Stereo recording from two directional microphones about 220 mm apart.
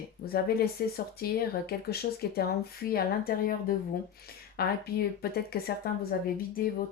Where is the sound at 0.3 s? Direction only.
45° left (ahead or behind).